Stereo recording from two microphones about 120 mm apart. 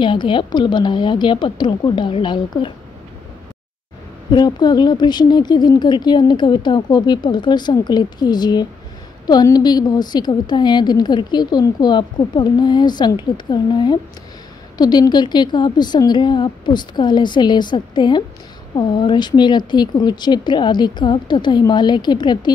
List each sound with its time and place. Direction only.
0.0 s a woman's voice: 40° left (ahead or behind)
4.3 s a woman's voice: 35° left (ahead or behind)